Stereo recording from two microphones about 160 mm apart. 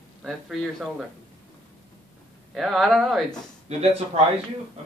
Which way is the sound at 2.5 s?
Centre (ahead or behind).